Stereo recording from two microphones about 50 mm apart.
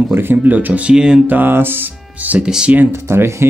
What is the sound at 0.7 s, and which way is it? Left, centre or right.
Speech, right.